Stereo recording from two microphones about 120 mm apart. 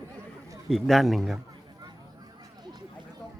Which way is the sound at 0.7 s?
Centre (ahead or behind).